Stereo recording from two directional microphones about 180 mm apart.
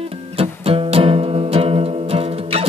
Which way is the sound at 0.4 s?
30° right (ahead or behind).